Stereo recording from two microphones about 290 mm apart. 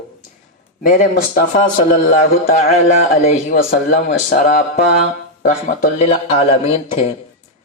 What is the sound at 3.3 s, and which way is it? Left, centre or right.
Speech, left.